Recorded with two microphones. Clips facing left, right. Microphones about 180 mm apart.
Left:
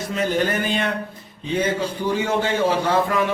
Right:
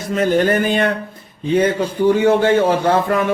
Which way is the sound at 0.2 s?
50° right (ahead or behind).